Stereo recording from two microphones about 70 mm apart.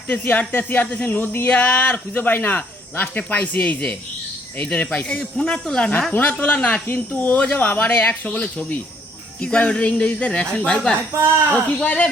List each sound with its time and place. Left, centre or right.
0.1 s speech: left
6.8 s speech: left
11.1 s a woman's voice: right
11.5 s speech: centre